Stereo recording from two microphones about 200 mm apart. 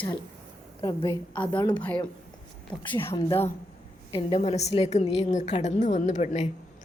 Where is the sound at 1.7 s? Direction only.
5° left (ahead or behind).